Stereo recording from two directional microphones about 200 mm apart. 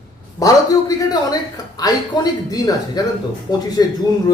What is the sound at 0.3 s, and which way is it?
A man's voice, 15° left (ahead or behind).